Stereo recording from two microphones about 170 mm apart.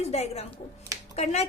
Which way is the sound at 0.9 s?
20° right (ahead or behind).